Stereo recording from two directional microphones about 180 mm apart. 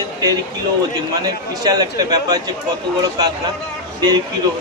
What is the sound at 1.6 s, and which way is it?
Speech, 20° right (ahead or behind).